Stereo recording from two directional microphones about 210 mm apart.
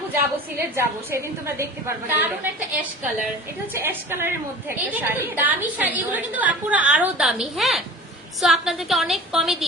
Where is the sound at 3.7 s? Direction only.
10° right (ahead or behind).